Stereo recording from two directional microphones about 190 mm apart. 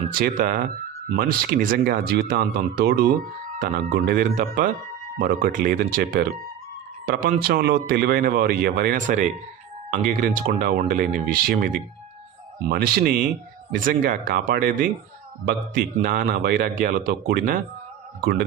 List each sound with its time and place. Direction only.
0.1 s speech: 50° right (ahead or behind)